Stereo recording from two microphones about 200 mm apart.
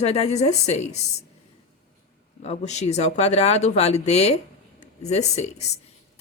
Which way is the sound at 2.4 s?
35° left (ahead or behind).